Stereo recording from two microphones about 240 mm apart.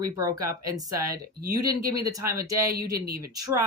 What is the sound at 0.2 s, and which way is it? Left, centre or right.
Speech, centre.